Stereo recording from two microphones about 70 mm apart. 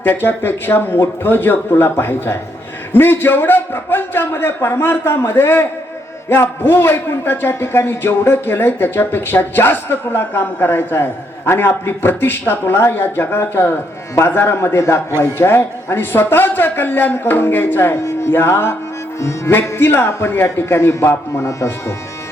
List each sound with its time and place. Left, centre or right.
0.0 s a man's voice: left